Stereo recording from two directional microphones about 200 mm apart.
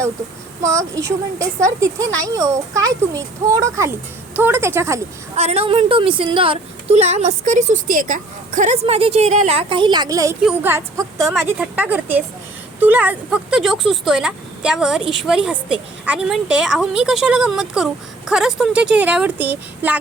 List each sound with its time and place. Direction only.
0.6 s a woman's voice: 15° right (ahead or behind)
5.4 s a woman's voice: 30° right (ahead or behind); by 20.0 s 10° right (ahead or behind)